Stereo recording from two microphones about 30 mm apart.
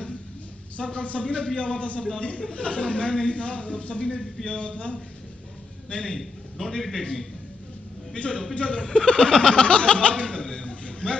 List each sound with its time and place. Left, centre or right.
0.7 s a man's voice: left
6.1 s a man's voice: centre
8.2 s a man's voice: left
8.5 s speech: left